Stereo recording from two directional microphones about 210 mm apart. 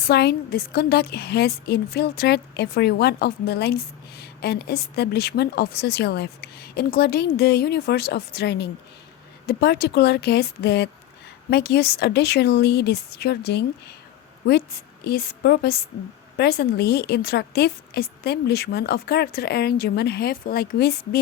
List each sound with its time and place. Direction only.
0.1 s a woman's voice: 50° left (ahead or behind)